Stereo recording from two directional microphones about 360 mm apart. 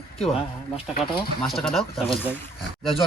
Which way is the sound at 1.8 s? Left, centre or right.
Centre.